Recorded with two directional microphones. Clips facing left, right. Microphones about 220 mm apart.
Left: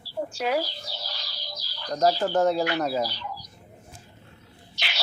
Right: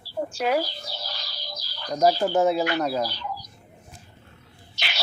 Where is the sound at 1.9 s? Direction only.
10° right (ahead or behind).